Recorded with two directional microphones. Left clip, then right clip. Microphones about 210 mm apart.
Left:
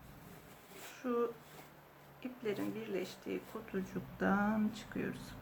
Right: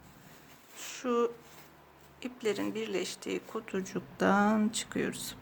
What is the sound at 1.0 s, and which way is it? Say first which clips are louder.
Speech: right 6 dB; 55° right (ahead or behind).